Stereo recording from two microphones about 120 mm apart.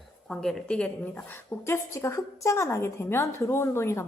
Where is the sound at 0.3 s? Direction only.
5° left (ahead or behind).